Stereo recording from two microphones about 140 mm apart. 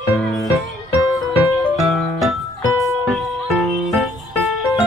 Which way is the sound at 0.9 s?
25° left (ahead or behind).